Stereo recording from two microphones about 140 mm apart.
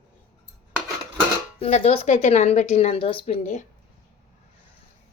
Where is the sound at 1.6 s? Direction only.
50° left (ahead or behind).